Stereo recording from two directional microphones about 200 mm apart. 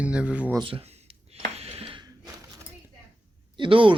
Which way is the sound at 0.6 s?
25° right (ahead or behind).